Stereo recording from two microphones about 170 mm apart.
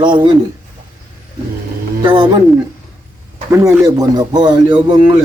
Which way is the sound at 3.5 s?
15° right (ahead or behind).